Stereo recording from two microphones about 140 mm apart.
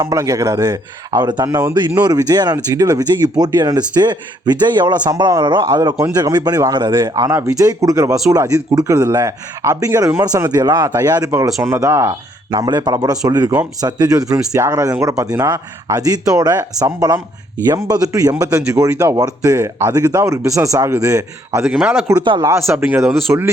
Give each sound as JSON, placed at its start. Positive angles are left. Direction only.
{"t": 0.0, "sound": "speech", "side_deg": -25}
{"t": 12.5, "sound": "speech", "side_deg": -30}
{"t": 21.6, "sound": "speech", "side_deg": -5}
{"t": 22.2, "sound": "speech", "side_deg": -35}
{"t": 22.4, "sound": "speech", "side_deg": -20}